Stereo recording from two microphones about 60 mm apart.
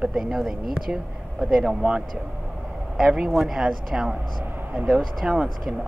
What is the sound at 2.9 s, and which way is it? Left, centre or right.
Speech, centre.